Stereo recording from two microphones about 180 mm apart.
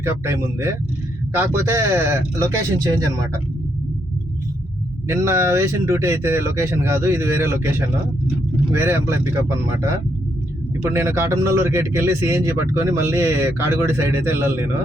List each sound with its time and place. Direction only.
0.0 s a man's voice: 15° right (ahead or behind)
5.0 s a man's voice: 15° right (ahead or behind)